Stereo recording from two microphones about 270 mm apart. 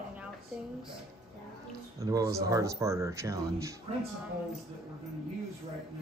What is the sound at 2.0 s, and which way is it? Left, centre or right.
Speech, centre.